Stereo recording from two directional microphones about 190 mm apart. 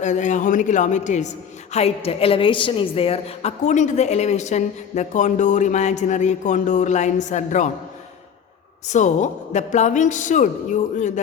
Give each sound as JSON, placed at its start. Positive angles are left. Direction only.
{"t": 0.0, "sound": "a woman's voice", "side_deg": 40}
{"t": 8.9, "sound": "a woman's voice", "side_deg": 40}